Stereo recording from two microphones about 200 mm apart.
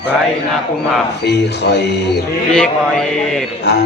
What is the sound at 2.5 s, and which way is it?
Speech, 5° left (ahead or behind).